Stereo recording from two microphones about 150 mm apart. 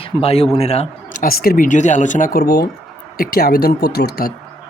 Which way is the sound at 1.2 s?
85° left.